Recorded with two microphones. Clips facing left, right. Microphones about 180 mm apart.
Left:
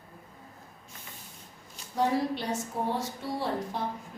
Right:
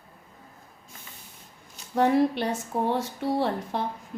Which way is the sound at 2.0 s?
65° right (ahead or behind).